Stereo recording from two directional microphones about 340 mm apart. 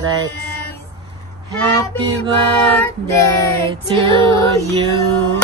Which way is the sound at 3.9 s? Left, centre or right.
Centre.